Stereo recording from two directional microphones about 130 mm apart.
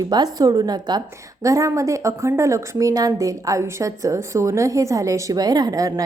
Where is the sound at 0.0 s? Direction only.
30° right (ahead or behind).